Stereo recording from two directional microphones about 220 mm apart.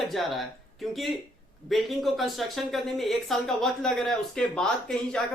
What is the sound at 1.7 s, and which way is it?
Speech, centre (ahead or behind).